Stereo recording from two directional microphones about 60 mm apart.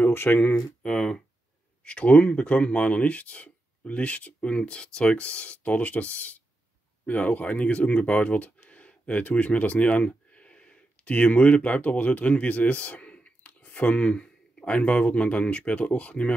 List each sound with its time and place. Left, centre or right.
0.0 s speech: left
0.6 s speech: centre